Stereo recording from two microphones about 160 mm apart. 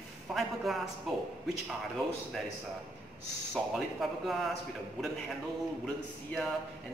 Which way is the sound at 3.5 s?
Centre (ahead or behind).